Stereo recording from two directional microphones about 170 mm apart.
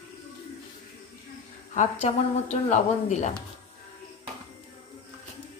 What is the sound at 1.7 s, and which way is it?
Speech, 45° left (ahead or behind).